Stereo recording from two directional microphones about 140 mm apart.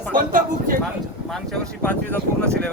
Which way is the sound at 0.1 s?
80° right.